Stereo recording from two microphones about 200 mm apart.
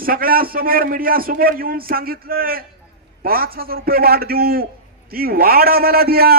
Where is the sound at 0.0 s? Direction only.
45° right (ahead or behind).